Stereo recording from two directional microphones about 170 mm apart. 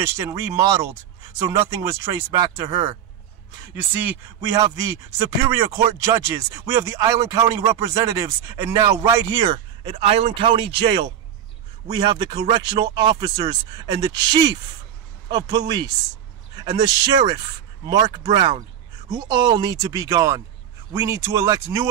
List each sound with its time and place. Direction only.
0.0 s speech: 20° right (ahead or behind)
3.7 s speech: 10° right (ahead or behind)